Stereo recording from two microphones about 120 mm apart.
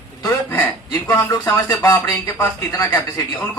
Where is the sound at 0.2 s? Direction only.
30° left (ahead or behind).